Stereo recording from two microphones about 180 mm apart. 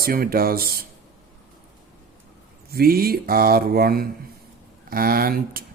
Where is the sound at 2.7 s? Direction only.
55° right (ahead or behind).